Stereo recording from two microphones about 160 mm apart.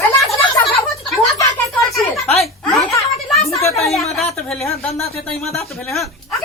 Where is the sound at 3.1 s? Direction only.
Centre (ahead or behind).